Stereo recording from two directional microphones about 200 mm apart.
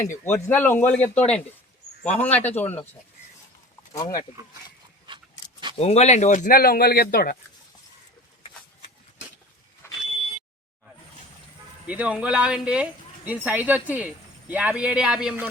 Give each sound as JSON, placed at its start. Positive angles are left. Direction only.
{"t": 0.3, "sound": "speech", "side_deg": 10}
{"t": 3.9, "sound": "speech", "side_deg": 15}
{"t": 5.0, "sound": "a sound", "side_deg": -25}
{"t": 5.7, "sound": "speech", "side_deg": 30}
{"t": 9.8, "sound": "vehicle", "side_deg": 15}
{"t": 11.9, "sound": "speech", "side_deg": -5}